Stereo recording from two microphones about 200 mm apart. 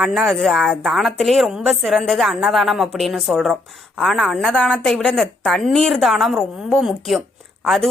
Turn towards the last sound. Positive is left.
turn(degrees=0)  # may be behind; listen again after turning